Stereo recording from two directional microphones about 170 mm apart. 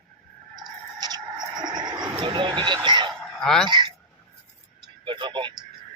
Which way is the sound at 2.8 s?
25° right (ahead or behind).